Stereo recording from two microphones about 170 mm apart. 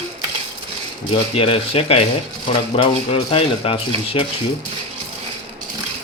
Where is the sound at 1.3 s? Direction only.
35° left (ahead or behind).